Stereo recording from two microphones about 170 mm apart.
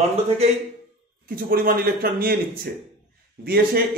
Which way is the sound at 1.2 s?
55° right (ahead or behind).